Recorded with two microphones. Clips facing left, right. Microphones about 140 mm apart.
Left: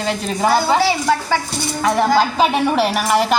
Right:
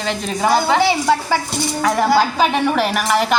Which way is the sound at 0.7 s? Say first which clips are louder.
Right 1 dB; 15° right (ahead or behind).